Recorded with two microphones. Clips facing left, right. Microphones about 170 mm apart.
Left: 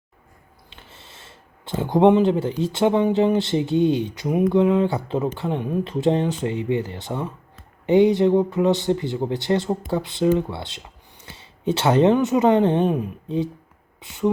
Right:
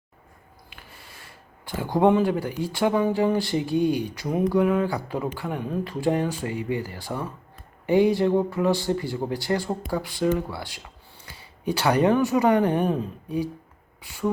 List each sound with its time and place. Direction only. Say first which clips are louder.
0.7 s speech: left 2 dB; 25° left (ahead or behind)